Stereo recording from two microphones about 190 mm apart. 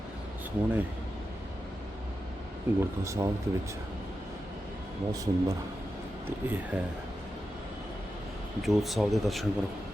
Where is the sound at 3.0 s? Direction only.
15° right (ahead or behind).